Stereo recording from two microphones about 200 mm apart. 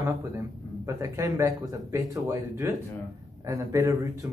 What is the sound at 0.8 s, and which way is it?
Speech, 15° right (ahead or behind).